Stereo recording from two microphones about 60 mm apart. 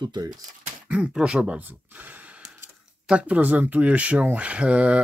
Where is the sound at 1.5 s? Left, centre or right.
Right.